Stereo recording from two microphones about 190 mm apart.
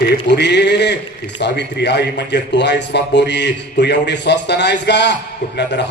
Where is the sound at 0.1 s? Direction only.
65° left (ahead or behind).